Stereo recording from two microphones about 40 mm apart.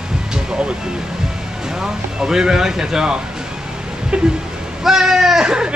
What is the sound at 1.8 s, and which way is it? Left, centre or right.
Speech, centre.